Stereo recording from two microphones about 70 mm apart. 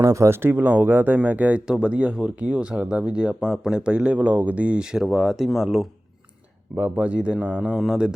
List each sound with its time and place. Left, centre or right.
0.0 s speech: right; by 5.9 s centre
6.7 s speech: right